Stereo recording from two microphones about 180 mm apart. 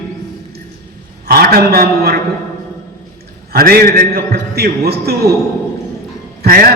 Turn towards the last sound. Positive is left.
turn(degrees=-55)  # may be behind; listen again after turning